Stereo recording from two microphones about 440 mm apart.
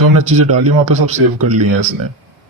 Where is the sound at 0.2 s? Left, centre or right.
Right.